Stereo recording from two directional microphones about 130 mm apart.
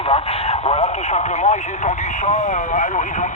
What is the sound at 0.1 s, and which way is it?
Speech, 55° left (ahead or behind).